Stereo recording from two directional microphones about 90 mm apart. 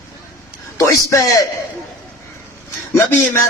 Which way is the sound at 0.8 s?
35° left (ahead or behind).